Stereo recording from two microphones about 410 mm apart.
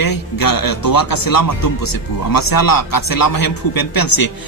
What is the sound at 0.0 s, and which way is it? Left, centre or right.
Speech, left.